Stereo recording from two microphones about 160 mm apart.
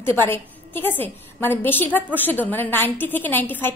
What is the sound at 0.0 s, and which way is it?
A woman's voice, 15° left (ahead or behind).